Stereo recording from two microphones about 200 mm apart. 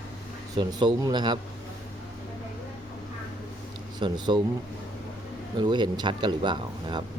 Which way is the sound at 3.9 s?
20° right (ahead or behind).